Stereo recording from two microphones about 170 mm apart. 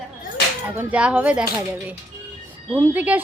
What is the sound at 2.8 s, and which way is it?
Speech, 10° right (ahead or behind).